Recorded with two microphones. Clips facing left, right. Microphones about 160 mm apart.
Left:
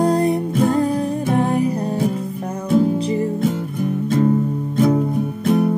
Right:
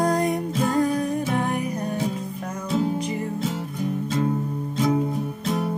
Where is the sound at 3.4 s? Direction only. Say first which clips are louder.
Left 7 dB; 55° left (ahead or behind).